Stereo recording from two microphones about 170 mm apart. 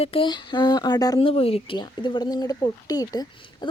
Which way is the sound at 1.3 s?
35° left (ahead or behind).